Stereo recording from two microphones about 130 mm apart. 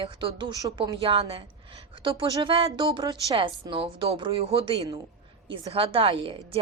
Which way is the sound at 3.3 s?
40° right (ahead or behind).